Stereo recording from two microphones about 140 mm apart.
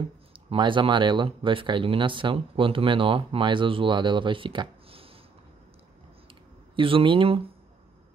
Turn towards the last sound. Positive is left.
turn(degrees=-40)  # may be behind; listen again after turning